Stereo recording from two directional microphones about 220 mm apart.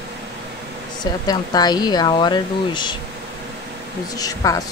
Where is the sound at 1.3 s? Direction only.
20° left (ahead or behind).